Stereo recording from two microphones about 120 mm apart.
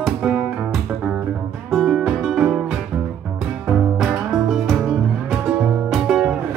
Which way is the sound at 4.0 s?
Centre (ahead or behind).